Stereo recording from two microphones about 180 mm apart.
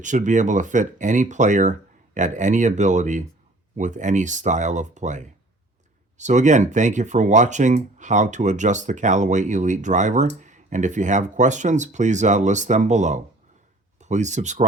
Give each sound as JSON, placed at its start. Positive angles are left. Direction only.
{"t": 0.0, "sound": "speech", "side_deg": -45}